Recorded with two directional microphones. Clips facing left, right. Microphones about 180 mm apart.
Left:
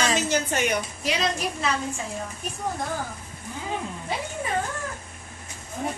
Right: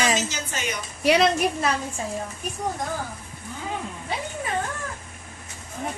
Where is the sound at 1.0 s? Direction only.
65° right (ahead or behind).